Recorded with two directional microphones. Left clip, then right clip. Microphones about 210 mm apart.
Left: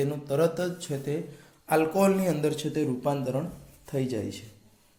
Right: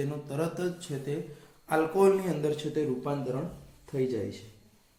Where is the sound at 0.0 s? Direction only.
40° left (ahead or behind).